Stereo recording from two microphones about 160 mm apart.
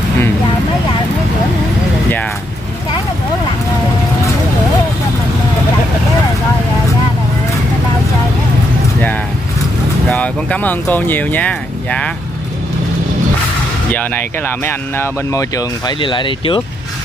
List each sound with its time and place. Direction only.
10.0 s speech: 10° left (ahead or behind)
13.9 s speech: 10° left (ahead or behind)
16.0 s speech: 30° left (ahead or behind)